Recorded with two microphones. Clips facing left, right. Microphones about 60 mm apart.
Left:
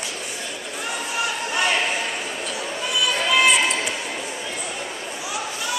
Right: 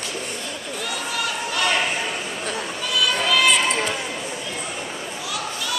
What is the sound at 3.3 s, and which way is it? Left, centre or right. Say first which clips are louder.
Run: left 1 dB; left.